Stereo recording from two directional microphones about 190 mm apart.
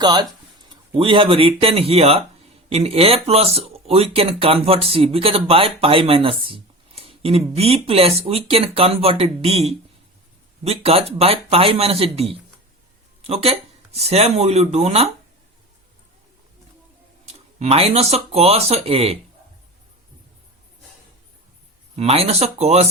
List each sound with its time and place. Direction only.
0.0 s speech: 20° right (ahead or behind)
17.2 s speech: 35° right (ahead or behind)
21.9 s speech: 35° right (ahead or behind)